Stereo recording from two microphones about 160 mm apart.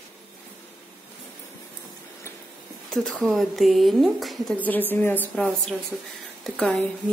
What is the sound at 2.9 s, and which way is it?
A woman's voice, 5° left (ahead or behind).